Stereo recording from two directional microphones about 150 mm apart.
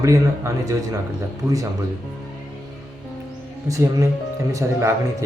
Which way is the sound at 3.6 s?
20° right (ahead or behind).